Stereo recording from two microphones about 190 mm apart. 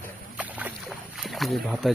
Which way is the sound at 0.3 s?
5° right (ahead or behind).